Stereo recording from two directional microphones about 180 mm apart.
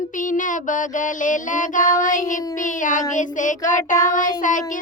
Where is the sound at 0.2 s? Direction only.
45° left (ahead or behind).